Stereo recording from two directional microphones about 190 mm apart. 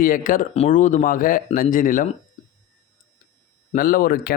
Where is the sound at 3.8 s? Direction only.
50° left (ahead or behind).